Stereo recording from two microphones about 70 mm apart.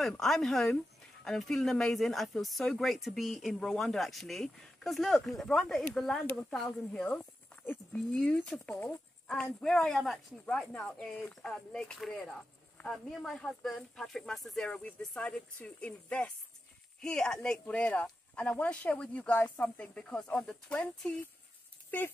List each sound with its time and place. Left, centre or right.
0.0 s speech: centre
6.9 s speech: centre
10.7 s speech: centre